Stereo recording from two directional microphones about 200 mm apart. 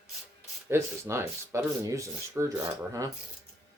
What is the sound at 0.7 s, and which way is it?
Speech, 15° right (ahead or behind).